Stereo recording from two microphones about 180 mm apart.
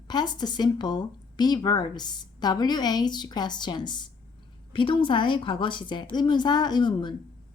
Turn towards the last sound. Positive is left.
turn(degrees=25)  # may be behind; listen again after turning